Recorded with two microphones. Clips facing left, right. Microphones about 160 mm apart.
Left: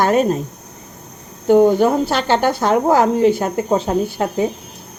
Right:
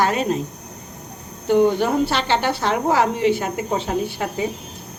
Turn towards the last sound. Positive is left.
turn(degrees=45)  # may be behind; listen again after turning